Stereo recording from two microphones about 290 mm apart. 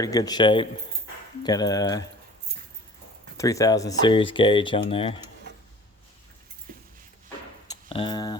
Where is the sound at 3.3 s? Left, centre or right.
Centre.